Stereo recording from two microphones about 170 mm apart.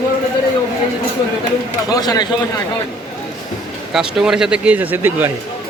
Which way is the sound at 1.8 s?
20° left (ahead or behind).